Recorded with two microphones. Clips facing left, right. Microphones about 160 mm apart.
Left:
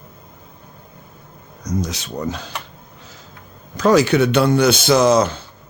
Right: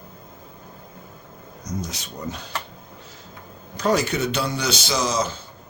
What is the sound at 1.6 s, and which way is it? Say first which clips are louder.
Speech: left 7 dB; 90° left.